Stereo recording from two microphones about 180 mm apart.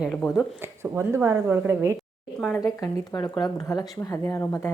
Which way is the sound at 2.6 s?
20° left (ahead or behind).